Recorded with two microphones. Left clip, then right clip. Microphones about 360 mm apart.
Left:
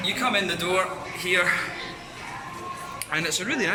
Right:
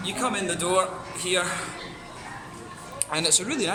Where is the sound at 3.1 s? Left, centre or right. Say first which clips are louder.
Right 1 dB; centre.